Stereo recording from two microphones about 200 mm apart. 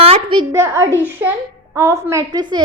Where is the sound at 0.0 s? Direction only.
25° right (ahead or behind).